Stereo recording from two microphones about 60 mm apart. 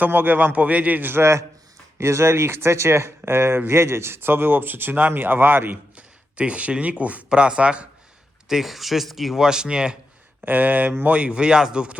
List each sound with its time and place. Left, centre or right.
0.0 s speech: right
1.2 s speech: right
6.3 s speech: centre
8.4 s speech: centre
10.4 s speech: right